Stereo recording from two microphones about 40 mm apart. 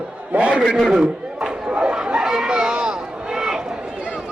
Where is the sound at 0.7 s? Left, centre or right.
Centre.